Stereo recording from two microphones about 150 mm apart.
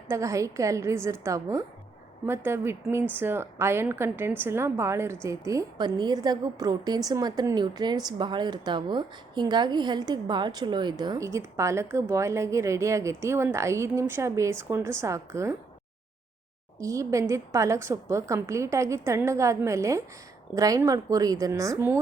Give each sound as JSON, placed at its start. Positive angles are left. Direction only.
{"t": 0.1, "sound": "a woman's voice", "side_deg": -20}
{"t": 16.8, "sound": "a woman's voice", "side_deg": -20}